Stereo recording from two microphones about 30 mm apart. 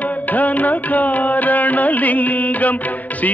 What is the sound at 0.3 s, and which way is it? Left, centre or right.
Music, left.